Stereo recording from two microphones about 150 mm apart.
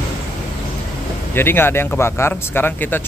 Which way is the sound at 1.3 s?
15° left (ahead or behind).